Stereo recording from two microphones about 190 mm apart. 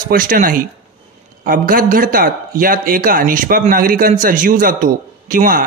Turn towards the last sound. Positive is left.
turn(degrees=-45)  # may be behind; listen again after turning